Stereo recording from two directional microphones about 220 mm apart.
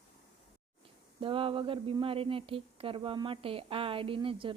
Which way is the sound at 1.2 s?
25° right (ahead or behind).